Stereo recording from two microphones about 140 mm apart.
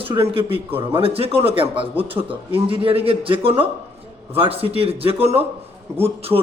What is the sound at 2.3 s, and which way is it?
A man's voice, 40° right (ahead or behind).